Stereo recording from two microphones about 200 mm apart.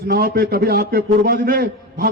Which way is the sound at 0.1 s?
50° right (ahead or behind).